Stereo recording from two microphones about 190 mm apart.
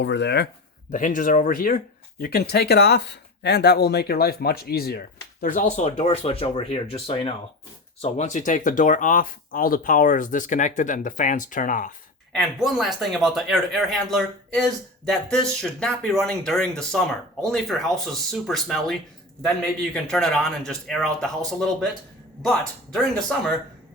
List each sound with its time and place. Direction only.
0.0 s speech: 65° left (ahead or behind)
0.9 s speech: 45° left (ahead or behind)
12.3 s speech: centre (ahead or behind)